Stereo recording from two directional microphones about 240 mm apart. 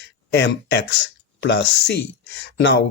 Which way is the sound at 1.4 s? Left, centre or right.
Left.